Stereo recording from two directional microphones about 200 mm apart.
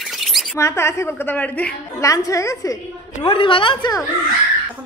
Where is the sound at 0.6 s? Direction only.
15° left (ahead or behind).